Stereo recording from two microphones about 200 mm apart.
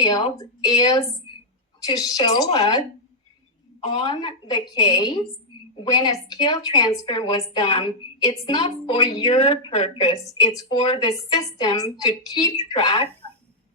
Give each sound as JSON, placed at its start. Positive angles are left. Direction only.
{"t": 0.0, "sound": "a woman's voice", "side_deg": 20}
{"t": 3.8, "sound": "a woman's voice", "side_deg": 30}
{"t": 9.3, "sound": "speech", "side_deg": 30}
{"t": 10.6, "sound": "a woman's voice", "side_deg": 20}